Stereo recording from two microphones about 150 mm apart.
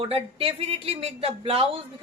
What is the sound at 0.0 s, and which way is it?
Speech, 40° right (ahead or behind).